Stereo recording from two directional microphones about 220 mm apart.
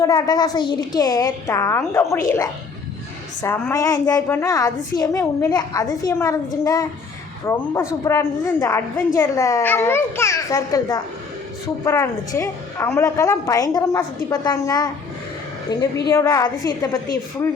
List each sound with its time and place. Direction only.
0.0 s a woman's voice: 15° left (ahead or behind)
3.4 s a woman's voice: 10° left (ahead or behind)